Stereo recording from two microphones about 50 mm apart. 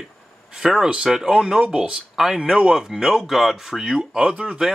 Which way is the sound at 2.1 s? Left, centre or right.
Centre.